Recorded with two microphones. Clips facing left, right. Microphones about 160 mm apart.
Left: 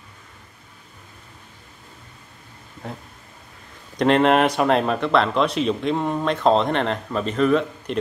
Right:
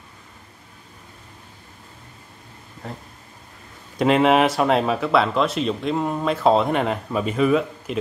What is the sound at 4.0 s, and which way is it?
Speech, 5° right (ahead or behind).